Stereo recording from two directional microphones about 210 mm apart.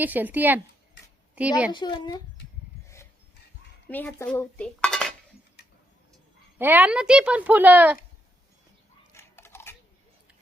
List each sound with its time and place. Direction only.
0.0 s speech: 10° right (ahead or behind)
1.7 s a child's voice: 20° left (ahead or behind)
3.8 s dishes: 10° left (ahead or behind)
6.6 s speech: 10° right (ahead or behind)
9.1 s a sound: 10° left (ahead or behind)